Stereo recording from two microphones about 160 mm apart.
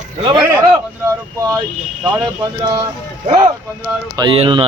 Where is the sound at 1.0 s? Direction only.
20° right (ahead or behind).